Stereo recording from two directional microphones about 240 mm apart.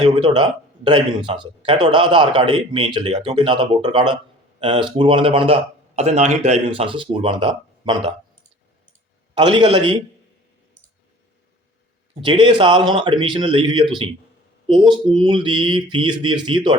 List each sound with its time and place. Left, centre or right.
0.0 s a man's voice: centre
9.3 s a man's voice: centre
12.2 s a man's voice: centre